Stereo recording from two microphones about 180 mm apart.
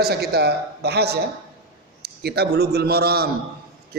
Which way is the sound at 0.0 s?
60° right (ahead or behind).